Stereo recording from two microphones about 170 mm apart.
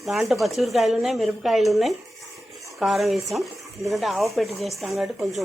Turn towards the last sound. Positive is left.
turn(degrees=0)  # may be behind; listen again after turning